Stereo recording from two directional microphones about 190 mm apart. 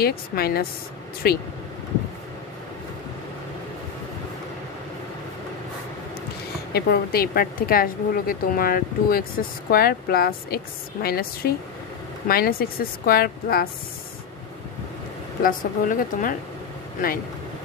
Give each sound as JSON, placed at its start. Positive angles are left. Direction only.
{"t": 0.0, "sound": "a woman's voice", "side_deg": 55}
{"t": 6.7, "sound": "a woman's voice", "side_deg": 55}
{"t": 15.4, "sound": "a woman's voice", "side_deg": 45}